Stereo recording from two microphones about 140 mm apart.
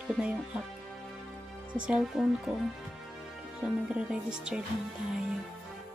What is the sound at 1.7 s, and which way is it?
Speech, 5° right (ahead or behind).